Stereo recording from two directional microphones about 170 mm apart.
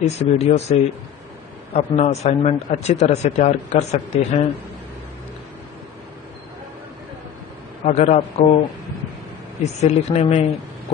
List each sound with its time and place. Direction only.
0.0 s a man's voice: 40° left (ahead or behind)
7.8 s a man's voice: 40° left (ahead or behind)
9.6 s a man's voice: 40° left (ahead or behind)